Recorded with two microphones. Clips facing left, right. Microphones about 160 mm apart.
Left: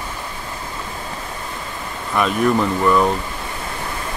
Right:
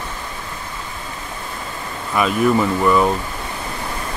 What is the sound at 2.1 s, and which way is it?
Speech, 5° right (ahead or behind).